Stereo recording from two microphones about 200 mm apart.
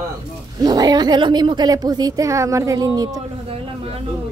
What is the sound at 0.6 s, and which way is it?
A woman's voice, 20° right (ahead or behind).